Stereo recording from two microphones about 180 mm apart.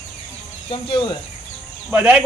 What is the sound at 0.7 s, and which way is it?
Speech, 30° left (ahead or behind).